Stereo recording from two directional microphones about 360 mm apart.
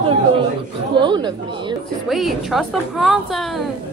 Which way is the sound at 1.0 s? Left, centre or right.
Centre.